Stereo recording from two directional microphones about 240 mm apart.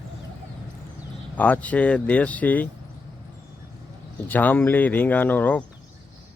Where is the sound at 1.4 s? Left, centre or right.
Centre.